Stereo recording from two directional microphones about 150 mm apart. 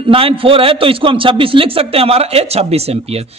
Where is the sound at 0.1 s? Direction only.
35° right (ahead or behind).